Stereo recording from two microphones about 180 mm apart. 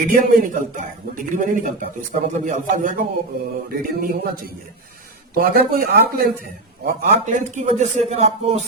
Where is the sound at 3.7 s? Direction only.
55° right (ahead or behind).